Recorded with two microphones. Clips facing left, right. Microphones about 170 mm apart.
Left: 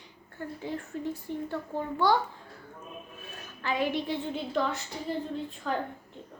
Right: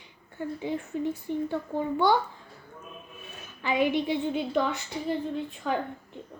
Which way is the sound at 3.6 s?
20° right (ahead or behind).